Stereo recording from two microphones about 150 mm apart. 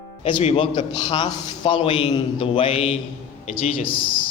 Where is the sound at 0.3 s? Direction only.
35° left (ahead or behind).